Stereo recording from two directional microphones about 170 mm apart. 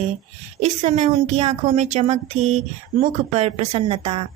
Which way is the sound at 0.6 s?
45° right (ahead or behind).